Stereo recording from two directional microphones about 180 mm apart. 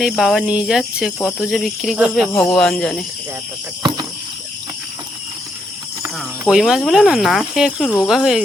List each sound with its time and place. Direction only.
0.0 s speech: centre (ahead or behind)
2.3 s speech: 20° left (ahead or behind)
2.6 s speech: centre (ahead or behind)
6.4 s speech: 5° right (ahead or behind)